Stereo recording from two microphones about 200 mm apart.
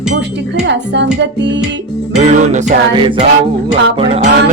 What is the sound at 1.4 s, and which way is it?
Music, 60° right (ahead or behind).